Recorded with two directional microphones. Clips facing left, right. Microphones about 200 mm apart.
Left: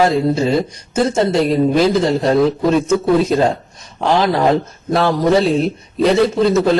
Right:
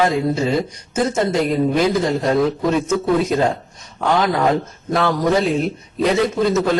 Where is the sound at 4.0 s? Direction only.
30° left (ahead or behind).